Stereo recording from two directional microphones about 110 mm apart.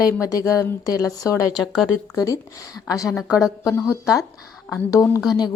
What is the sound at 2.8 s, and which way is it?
Speech, 30° left (ahead or behind).